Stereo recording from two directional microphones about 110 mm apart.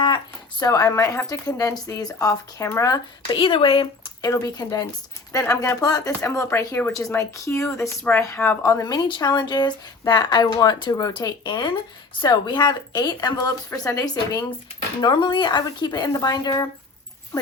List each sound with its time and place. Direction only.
0.6 s a woman's voice: 30° left (ahead or behind)
3.3 s speech: 55° left (ahead or behind)
4.2 s a woman's voice: 30° left (ahead or behind)
9.0 s a woman's voice: 40° left (ahead or behind)
15.0 s a woman's voice: 40° left (ahead or behind)
17.3 s speech: 25° left (ahead or behind)